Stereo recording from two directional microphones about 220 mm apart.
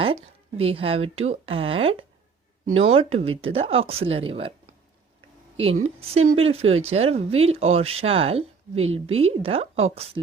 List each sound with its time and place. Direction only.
0.0 s speech: 25° right (ahead or behind)
5.5 s a woman's voice: 25° right (ahead or behind)